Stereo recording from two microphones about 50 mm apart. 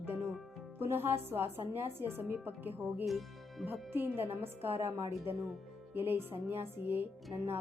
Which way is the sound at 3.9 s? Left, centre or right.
Right.